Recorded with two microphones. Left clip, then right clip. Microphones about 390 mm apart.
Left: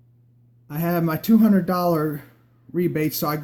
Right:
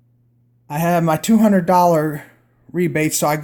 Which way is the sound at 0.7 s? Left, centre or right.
Right.